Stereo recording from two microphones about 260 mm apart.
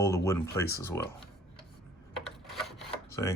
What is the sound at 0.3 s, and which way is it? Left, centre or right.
Speech, centre.